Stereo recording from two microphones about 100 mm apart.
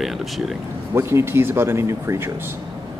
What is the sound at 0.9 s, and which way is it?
Speech, 25° right (ahead or behind).